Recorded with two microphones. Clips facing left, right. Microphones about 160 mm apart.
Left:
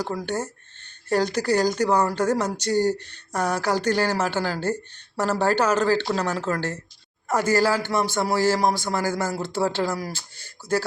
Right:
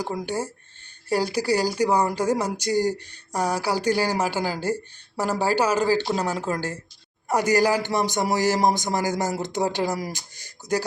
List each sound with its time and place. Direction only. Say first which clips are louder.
0.0 s speech: even; 15° right (ahead or behind)